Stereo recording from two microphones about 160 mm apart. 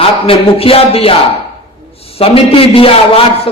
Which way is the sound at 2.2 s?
35° left (ahead or behind).